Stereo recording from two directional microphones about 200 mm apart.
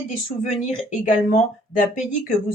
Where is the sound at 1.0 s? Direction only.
40° left (ahead or behind).